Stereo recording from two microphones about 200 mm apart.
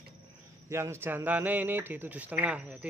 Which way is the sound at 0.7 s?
15° right (ahead or behind).